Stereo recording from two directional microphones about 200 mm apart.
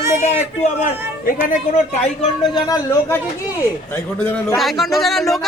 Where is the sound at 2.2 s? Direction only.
20° left (ahead or behind).